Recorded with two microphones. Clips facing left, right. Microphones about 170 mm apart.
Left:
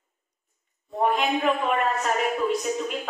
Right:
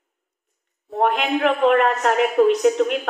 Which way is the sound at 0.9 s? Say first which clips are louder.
Right 3 dB; 80° right.